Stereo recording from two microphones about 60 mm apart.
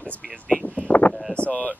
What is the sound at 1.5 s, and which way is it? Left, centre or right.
Speech, left.